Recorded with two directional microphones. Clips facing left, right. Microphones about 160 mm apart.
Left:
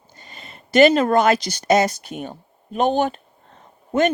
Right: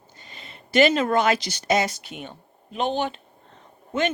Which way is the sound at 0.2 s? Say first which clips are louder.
Left 3 dB; 45° left (ahead or behind).